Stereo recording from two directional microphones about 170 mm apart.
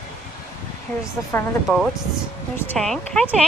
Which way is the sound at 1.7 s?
Centre (ahead or behind).